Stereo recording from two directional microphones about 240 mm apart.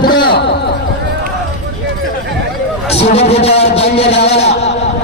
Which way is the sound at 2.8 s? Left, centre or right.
Left.